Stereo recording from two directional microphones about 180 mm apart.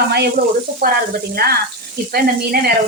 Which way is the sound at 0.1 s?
60° right (ahead or behind).